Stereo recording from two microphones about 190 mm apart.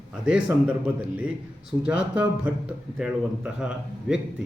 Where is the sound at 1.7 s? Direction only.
20° right (ahead or behind).